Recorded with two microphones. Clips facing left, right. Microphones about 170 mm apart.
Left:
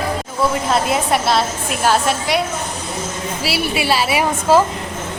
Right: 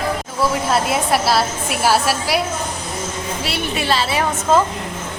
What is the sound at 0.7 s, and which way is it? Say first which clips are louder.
A woman's voice: left 1 dB; centre (ahead or behind).